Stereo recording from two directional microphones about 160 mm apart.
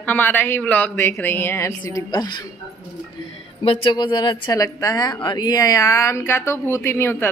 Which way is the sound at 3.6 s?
30° left (ahead or behind).